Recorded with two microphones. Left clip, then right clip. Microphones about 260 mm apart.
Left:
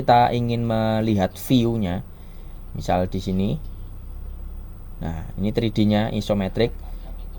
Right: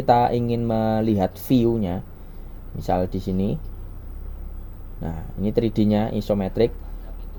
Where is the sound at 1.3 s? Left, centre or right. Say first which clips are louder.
Right 1 dB; left.